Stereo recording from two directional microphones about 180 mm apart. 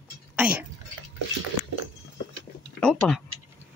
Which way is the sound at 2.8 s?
5° left (ahead or behind).